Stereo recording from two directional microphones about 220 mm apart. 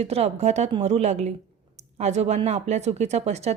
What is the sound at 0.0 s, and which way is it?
A woman's voice, 30° right (ahead or behind).